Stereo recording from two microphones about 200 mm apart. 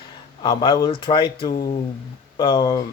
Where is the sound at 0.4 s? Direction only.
20° left (ahead or behind).